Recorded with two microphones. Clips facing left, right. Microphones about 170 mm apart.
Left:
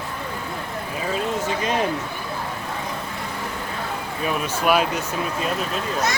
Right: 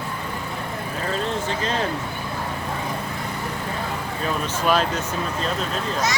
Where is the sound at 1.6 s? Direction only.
15° left (ahead or behind).